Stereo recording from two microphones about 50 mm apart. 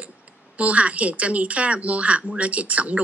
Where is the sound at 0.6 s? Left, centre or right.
Right.